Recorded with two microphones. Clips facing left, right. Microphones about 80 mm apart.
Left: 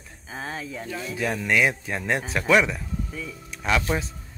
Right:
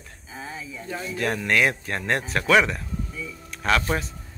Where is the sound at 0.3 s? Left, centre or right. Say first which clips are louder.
Left 3 dB; left.